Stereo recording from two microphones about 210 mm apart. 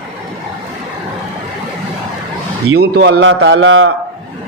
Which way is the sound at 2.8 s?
50° right (ahead or behind).